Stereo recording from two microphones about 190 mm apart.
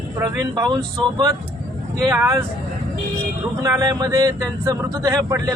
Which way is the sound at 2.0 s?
15° right (ahead or behind).